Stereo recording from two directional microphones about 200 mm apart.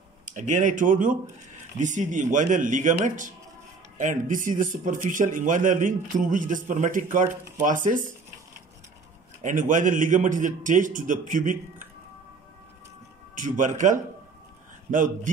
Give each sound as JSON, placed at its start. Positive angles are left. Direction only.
{"t": 0.2, "sound": "a man's voice", "side_deg": -40}
{"t": 9.4, "sound": "a man's voice", "side_deg": -40}
{"t": 13.3, "sound": "a man's voice", "side_deg": -40}